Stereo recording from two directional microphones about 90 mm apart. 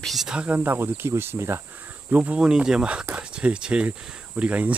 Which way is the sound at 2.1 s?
15° right (ahead or behind).